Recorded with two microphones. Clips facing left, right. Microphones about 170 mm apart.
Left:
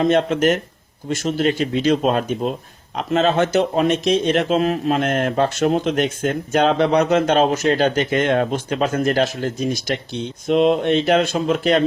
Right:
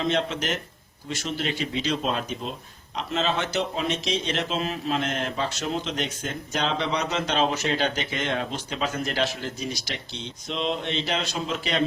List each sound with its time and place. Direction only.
0.0 s speech: 50° left (ahead or behind)